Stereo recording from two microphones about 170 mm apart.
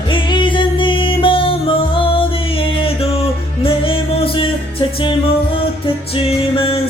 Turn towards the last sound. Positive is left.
turn(degrees=30)  # may be behind; listen again after turning